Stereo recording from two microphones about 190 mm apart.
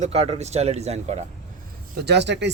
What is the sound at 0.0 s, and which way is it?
Speech, 35° right (ahead or behind).